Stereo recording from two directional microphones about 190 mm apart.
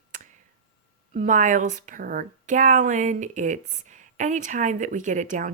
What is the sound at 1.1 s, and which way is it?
Speech, 40° right (ahead or behind).